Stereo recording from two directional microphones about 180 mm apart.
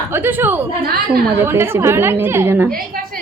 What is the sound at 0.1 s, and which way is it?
A woman's voice, 10° right (ahead or behind).